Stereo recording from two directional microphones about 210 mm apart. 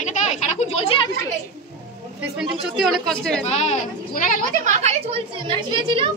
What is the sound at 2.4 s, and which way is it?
Speech, centre (ahead or behind).